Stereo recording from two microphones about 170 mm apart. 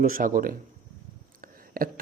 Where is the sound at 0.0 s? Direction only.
55° right (ahead or behind).